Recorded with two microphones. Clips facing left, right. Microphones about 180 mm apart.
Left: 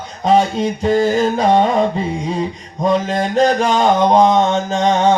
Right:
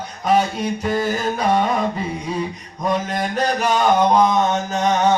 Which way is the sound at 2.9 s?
25° left (ahead or behind).